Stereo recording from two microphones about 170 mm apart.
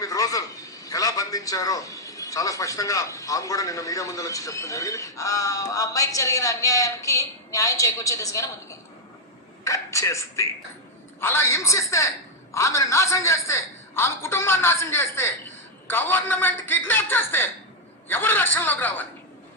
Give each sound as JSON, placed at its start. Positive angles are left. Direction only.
{"t": 0.0, "sound": "a man's voice", "side_deg": 20}
{"t": 9.6, "sound": "a man's voice", "side_deg": 20}